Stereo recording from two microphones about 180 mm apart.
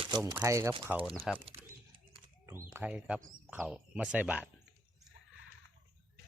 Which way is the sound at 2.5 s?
10° right (ahead or behind).